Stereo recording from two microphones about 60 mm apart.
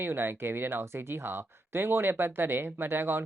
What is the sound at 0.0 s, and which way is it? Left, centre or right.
Speech, right.